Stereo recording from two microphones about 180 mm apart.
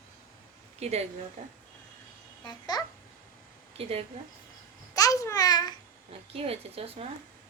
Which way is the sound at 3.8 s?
35° right (ahead or behind).